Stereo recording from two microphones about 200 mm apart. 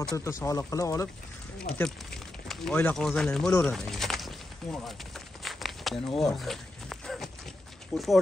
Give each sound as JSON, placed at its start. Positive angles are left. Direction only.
{"t": 0.1, "sound": "speech", "side_deg": 15}
{"t": 2.4, "sound": "speech", "side_deg": 0}
{"t": 5.4, "sound": "walk", "side_deg": 0}
{"t": 7.9, "sound": "speech", "side_deg": 0}